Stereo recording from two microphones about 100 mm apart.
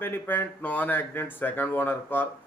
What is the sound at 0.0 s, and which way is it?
Speech, 20° left (ahead or behind).